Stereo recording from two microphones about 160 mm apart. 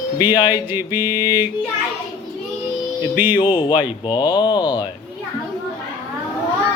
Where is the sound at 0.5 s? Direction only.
10° right (ahead or behind).